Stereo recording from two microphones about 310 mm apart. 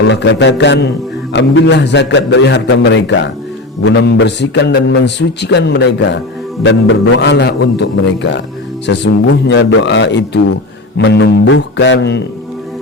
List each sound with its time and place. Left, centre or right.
0.1 s a man's voice: left